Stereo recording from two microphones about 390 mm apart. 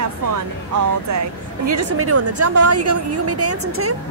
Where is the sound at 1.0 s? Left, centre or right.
Right.